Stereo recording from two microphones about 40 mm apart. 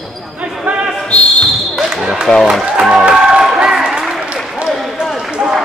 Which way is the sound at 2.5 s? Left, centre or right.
Centre.